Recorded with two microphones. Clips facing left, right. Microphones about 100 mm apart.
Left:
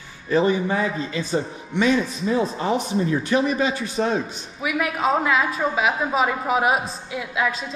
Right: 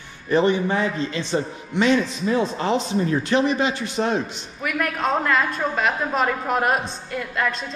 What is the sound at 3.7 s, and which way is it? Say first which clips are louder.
Speech: even; 40° left (ahead or behind).